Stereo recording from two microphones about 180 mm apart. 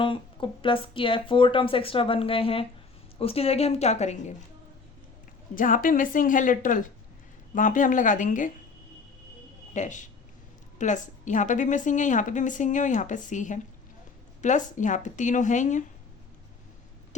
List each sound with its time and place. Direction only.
0.0 s a woman's voice: 30° left (ahead or behind)
5.5 s a woman's voice: 50° left (ahead or behind)
9.7 s a woman's voice: 45° left (ahead or behind)